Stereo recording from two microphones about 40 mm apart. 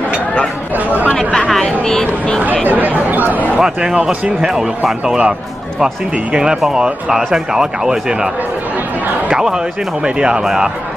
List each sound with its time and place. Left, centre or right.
1.5 s speech: centre
2.6 s speech: right
3.8 s speech: right
4.4 s speech: centre
6.3 s speech: centre
10.0 s speech: right